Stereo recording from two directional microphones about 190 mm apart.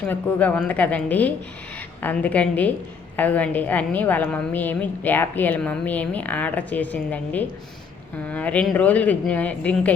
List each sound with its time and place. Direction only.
0.0 s a woman's voice: 10° left (ahead or behind)